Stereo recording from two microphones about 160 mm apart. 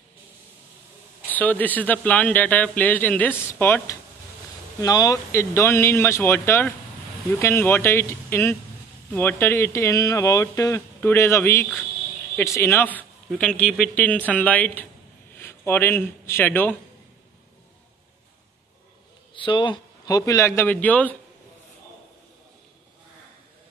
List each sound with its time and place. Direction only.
1.3 s a man's voice: 10° left (ahead or behind)
4.7 s a man's voice: 25° left (ahead or behind)
19.3 s a man's voice: 30° left (ahead or behind); by 21.1 s 10° left (ahead or behind)